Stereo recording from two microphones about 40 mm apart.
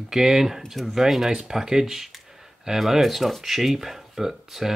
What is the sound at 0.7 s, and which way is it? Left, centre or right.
Speech, centre.